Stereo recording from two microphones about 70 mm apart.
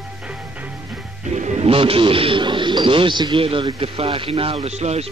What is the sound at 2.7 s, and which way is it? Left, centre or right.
Speech, right.